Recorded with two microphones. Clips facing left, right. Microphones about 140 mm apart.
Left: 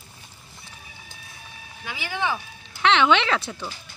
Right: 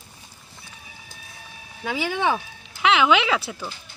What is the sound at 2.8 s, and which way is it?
Speech, 5° right (ahead or behind).